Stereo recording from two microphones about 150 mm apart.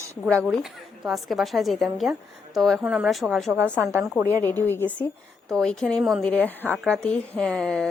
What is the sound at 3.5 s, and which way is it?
Speech, 15° right (ahead or behind).